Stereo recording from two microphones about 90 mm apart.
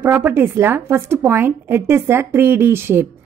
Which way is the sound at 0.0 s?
25° right (ahead or behind).